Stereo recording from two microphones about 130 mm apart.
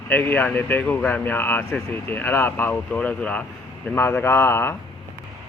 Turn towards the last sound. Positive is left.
turn(degrees=20)  # may be behind; listen again after turning